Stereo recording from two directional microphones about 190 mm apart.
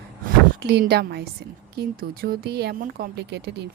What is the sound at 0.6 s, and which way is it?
A woman's voice, 60° right (ahead or behind).